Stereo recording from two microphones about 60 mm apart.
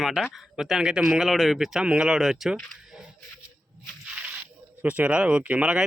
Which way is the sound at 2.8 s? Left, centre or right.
Centre.